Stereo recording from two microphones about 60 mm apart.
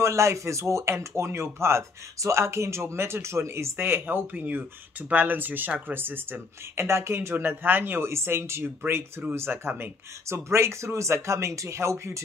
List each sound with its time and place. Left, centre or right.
0.0 s speech: right
10.2 s speech: right